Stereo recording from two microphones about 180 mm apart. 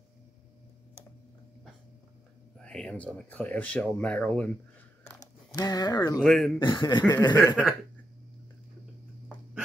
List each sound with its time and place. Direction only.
2.6 s speech: 5° left (ahead or behind)
5.0 s a sound: 20° left (ahead or behind)
6.1 s speech: centre (ahead or behind)
6.6 s chuckle: 25° left (ahead or behind)